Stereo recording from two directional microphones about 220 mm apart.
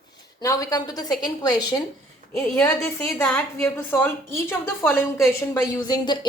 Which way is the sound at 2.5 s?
5° left (ahead or behind).